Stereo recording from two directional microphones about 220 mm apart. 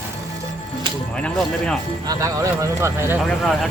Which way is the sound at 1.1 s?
5° left (ahead or behind).